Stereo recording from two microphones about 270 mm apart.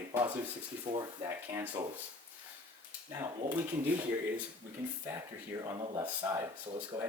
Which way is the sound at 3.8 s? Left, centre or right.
Centre.